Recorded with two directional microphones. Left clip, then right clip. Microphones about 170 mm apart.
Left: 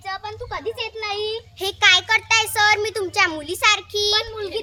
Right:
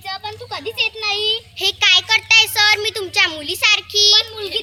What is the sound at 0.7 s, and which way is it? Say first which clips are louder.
Child singing: right 7 dB; 20° left (ahead or behind).